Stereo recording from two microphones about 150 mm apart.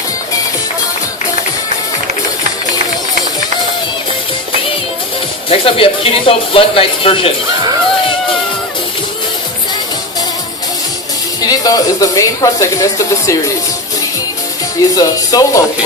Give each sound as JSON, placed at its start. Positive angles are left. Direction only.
{"t": 5.5, "sound": "speech", "side_deg": 35}
{"t": 11.3, "sound": "speech", "side_deg": 25}
{"t": 14.9, "sound": "speech", "side_deg": 25}